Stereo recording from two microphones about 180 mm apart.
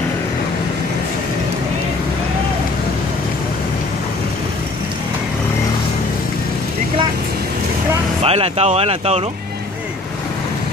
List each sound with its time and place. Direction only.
8.2 s speech: 35° right (ahead or behind)